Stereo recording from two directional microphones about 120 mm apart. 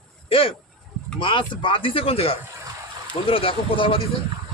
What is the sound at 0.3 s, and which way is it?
Speech, 50° left (ahead or behind).